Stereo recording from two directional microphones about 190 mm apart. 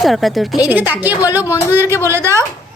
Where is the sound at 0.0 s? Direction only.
Centre (ahead or behind).